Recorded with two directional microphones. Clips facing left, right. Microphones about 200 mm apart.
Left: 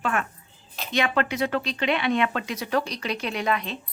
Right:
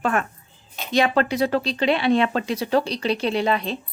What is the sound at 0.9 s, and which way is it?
Speech, 35° right (ahead or behind).